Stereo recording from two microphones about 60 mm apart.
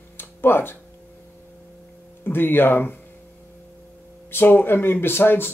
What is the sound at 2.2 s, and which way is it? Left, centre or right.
Speech, left.